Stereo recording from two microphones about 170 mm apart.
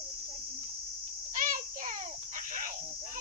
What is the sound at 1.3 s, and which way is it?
Child singing, 50° right (ahead or behind).